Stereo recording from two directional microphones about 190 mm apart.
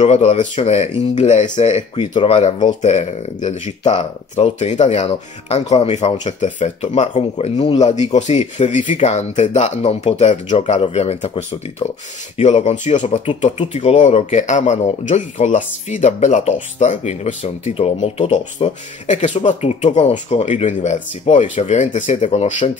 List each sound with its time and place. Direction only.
0.0 s speech: 35° left (ahead or behind)
11.8 s speech: 20° left (ahead or behind)
12.4 s speech: 40° left (ahead or behind)